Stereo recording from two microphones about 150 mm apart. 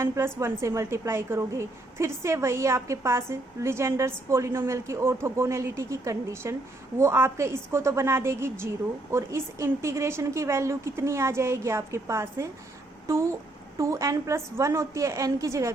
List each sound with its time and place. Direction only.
0.3 s a woman's voice: 20° right (ahead or behind)